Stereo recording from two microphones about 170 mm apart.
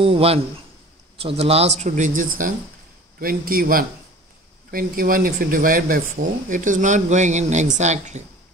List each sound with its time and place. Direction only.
0.0 s a man's voice: 35° right (ahead or behind)